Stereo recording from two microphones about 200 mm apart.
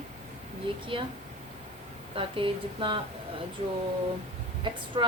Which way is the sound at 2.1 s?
25° right (ahead or behind).